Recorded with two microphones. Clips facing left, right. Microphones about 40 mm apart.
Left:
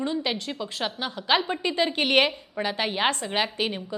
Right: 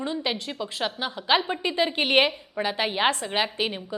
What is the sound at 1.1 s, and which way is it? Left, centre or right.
Speech, centre.